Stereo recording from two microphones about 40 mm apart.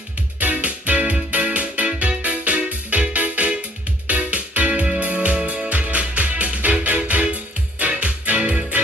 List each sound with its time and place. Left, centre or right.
0.3 s music: right